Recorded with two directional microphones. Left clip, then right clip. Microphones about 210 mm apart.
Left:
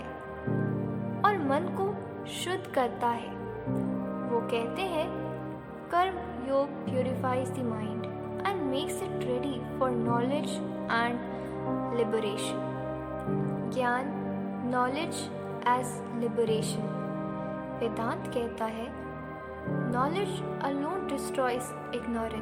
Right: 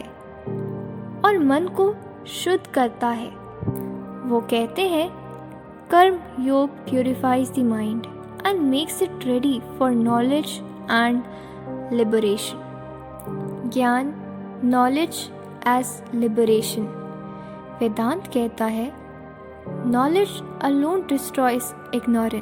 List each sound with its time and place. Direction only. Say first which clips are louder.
1.2 s music: right 9 dB; 40° right (ahead or behind)
2.4 s speech: right 9 dB; 30° right (ahead or behind)
4.4 s speech: right 9 dB; 40° right (ahead or behind)
13.7 s speech: right 9 dB; 40° right (ahead or behind)
19.9 s speech: right 11 dB; 40° right (ahead or behind)